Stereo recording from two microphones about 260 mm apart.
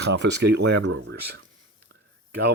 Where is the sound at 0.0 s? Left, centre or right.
Right.